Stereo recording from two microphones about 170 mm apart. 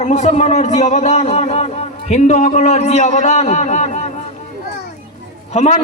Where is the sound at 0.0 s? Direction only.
40° left (ahead or behind).